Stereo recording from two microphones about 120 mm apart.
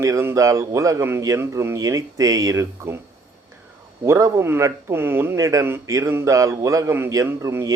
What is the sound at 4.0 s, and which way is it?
Speech, 25° right (ahead or behind).